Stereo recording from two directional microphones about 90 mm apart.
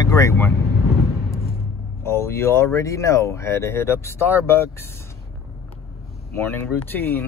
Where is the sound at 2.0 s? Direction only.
30° left (ahead or behind).